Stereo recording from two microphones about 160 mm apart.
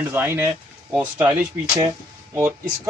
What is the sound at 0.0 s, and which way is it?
Speech, 15° right (ahead or behind).